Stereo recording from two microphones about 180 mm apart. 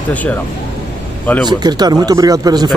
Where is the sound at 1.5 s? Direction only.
20° right (ahead or behind).